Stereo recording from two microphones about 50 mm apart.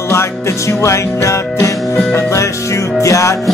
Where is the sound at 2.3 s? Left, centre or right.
Left.